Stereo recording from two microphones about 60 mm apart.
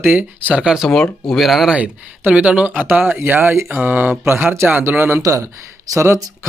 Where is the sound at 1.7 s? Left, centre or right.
Right.